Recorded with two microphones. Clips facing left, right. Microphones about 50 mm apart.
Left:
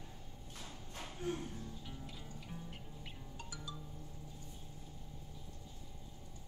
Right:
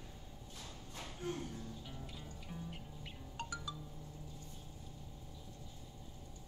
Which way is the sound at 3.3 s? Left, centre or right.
Right.